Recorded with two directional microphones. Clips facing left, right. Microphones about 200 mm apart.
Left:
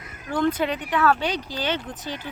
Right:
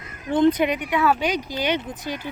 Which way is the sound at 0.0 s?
20° right (ahead or behind).